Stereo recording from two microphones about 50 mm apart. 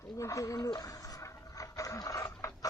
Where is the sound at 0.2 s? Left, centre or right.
Left.